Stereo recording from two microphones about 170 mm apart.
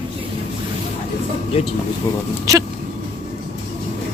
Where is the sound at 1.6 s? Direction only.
35° left (ahead or behind).